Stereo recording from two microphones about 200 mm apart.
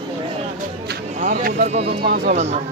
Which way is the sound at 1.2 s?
40° right (ahead or behind).